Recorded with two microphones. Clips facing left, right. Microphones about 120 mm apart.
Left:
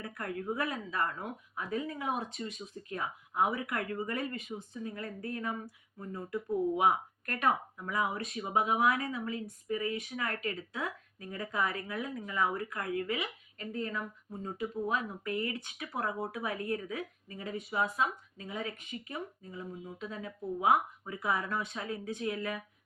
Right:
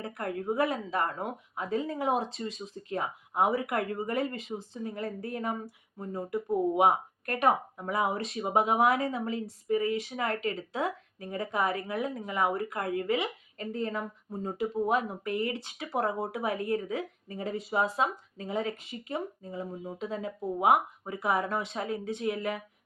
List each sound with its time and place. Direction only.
0.0 s speech: 25° right (ahead or behind)